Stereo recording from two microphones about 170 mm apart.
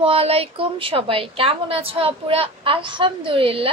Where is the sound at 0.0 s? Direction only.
35° right (ahead or behind).